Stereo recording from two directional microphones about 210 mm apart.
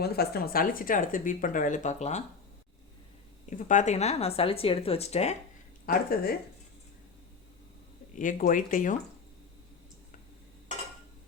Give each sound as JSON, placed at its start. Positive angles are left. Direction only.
{"t": 0.0, "sound": "speech", "side_deg": 50}
{"t": 3.7, "sound": "speech", "side_deg": 35}
{"t": 5.8, "sound": "speech", "side_deg": 45}
{"t": 8.1, "sound": "speech", "side_deg": 40}